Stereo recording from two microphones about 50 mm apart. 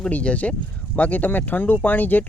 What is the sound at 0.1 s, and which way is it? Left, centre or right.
Speech, left.